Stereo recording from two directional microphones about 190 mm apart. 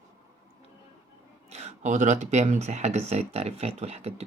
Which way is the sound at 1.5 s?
35° right (ahead or behind).